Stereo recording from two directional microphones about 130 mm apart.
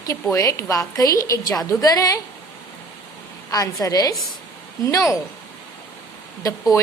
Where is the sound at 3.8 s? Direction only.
25° left (ahead or behind).